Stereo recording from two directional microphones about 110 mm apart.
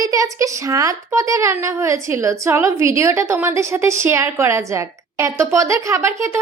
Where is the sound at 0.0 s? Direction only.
30° right (ahead or behind).